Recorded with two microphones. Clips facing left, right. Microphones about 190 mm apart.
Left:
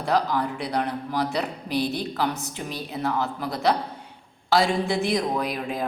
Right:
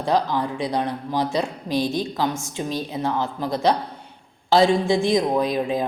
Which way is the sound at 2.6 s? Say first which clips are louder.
Right 5 dB; 20° right (ahead or behind).